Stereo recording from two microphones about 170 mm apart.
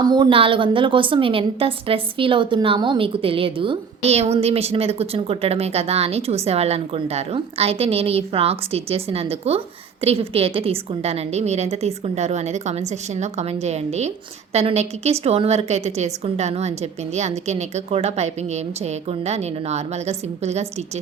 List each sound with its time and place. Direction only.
0.0 s a woman's voice: 25° right (ahead or behind)